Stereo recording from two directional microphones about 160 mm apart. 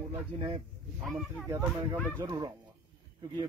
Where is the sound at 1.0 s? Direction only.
Centre (ahead or behind).